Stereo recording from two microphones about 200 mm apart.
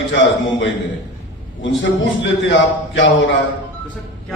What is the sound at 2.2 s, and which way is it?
A man's voice, 65° left (ahead or behind).